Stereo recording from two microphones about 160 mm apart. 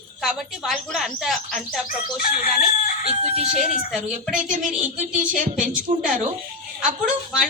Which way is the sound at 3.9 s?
5° right (ahead or behind).